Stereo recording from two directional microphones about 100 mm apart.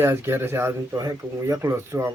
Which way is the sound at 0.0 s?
25° right (ahead or behind).